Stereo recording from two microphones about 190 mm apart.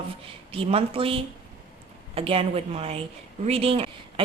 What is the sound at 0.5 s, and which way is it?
A woman's voice, 30° right (ahead or behind).